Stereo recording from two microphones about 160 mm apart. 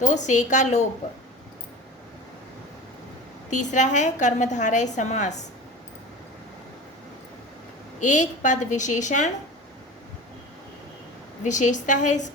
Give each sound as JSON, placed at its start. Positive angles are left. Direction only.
{"t": 0.0, "sound": "a woman's voice", "side_deg": 50}
{"t": 3.5, "sound": "a woman's voice", "side_deg": 50}
{"t": 7.9, "sound": "a woman's voice", "side_deg": 50}
{"t": 11.4, "sound": "a woman's voice", "side_deg": 50}